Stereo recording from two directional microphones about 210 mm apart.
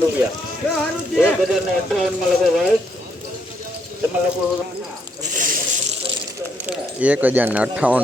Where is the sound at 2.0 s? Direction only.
Centre (ahead or behind).